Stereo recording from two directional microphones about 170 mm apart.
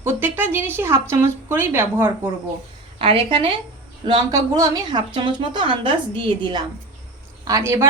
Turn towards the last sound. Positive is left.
turn(degrees=-15)  # may be behind; listen again after turning